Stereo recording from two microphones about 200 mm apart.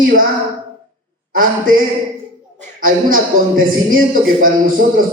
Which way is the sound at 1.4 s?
45° right (ahead or behind).